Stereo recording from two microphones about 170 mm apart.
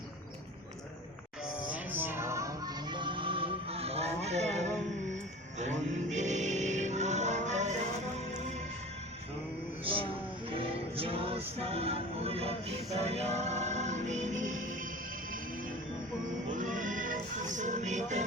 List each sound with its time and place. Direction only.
1.6 s music: 10° right (ahead or behind); by 7.8 s 45° right (ahead or behind)
9.8 s music: 30° right (ahead or behind); by 14.8 s 50° right (ahead or behind)
16.5 s music: 50° right (ahead or behind)